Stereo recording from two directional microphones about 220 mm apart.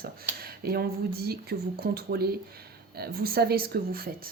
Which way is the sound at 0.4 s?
45° right (ahead or behind).